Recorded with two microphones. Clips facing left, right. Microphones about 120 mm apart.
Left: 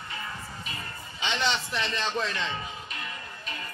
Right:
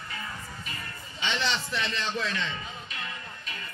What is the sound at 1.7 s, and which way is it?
Speech, 30° left (ahead or behind).